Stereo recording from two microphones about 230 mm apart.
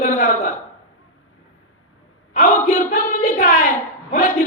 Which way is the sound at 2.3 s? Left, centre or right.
Left.